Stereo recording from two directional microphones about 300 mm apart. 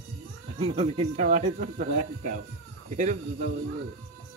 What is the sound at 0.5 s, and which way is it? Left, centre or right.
Speech, centre.